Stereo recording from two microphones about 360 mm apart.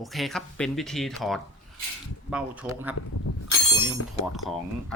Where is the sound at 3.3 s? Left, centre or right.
Left.